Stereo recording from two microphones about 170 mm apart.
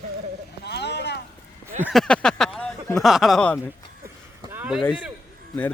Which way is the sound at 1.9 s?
5° left (ahead or behind).